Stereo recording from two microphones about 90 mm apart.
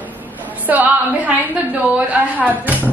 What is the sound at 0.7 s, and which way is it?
A woman's voice, 20° right (ahead or behind).